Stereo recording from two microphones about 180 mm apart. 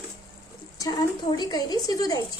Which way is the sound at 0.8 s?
20° left (ahead or behind).